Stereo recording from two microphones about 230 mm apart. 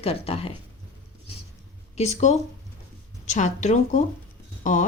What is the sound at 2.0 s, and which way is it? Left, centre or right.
Speech, left.